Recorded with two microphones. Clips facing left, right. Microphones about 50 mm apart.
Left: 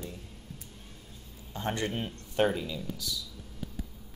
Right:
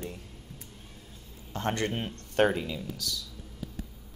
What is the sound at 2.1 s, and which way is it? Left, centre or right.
Speech, right.